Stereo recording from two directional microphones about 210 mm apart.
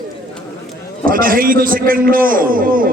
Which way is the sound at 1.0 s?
40° right (ahead or behind).